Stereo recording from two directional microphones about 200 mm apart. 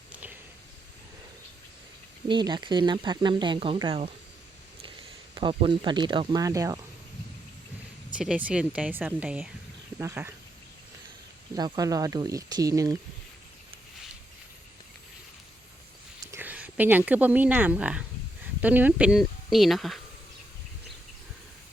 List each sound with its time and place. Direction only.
0.1 s a sound: 10° right (ahead or behind)
2.2 s speech: 25° right (ahead or behind)
5.4 s speech: 25° right (ahead or behind)
8.2 s speech: 5° right (ahead or behind)
11.5 s speech: 20° right (ahead or behind)
16.2 s speech: 10° right (ahead or behind)